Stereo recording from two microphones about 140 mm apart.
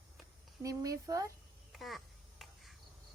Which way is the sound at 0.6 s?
25° right (ahead or behind).